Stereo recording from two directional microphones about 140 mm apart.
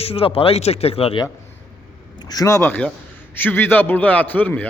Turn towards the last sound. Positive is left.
turn(degrees=10)  # may be behind; listen again after turning